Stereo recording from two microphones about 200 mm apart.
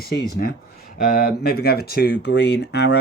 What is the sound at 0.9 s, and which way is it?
Speech, 45° left (ahead or behind).